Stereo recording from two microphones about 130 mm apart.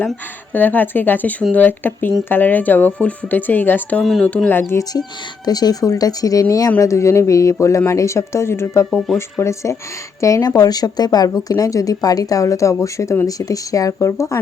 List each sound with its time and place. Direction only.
0.5 s speech: 15° left (ahead or behind)
4.0 s speech: centre (ahead or behind)
4.3 s speech: 10° left (ahead or behind)
4.7 s speech: 25° left (ahead or behind)
8.9 s speech: centre (ahead or behind)
9.4 s speech: 20° left (ahead or behind)